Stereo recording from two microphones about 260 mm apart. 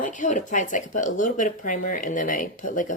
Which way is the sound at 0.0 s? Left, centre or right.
Left.